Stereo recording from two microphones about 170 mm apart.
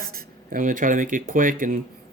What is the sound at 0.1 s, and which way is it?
Speech, 50° right (ahead or behind).